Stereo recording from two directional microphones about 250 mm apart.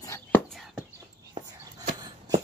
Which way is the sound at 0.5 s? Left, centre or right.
Centre.